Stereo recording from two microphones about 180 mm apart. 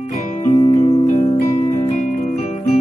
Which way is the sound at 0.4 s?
35° left (ahead or behind).